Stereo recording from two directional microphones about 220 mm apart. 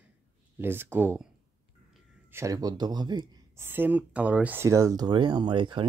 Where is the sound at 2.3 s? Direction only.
15° right (ahead or behind).